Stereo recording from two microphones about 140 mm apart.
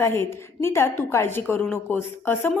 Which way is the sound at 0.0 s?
15° left (ahead or behind).